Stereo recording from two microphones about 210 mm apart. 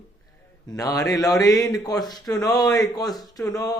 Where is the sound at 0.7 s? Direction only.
15° left (ahead or behind).